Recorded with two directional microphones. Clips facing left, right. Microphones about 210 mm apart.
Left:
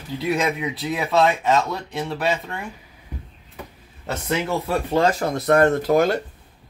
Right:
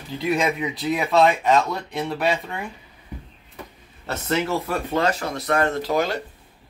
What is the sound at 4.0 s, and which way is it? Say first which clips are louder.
Speech: even; 15° left (ahead or behind).